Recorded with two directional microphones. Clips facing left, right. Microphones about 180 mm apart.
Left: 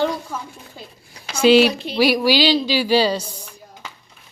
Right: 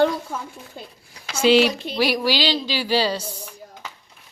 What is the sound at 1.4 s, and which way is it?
Speech, 10° left (ahead or behind).